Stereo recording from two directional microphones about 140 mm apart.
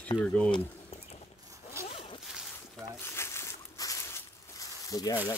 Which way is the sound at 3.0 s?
20° left (ahead or behind).